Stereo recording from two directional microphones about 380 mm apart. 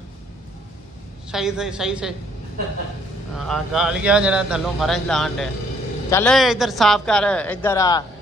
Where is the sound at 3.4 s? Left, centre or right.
Centre.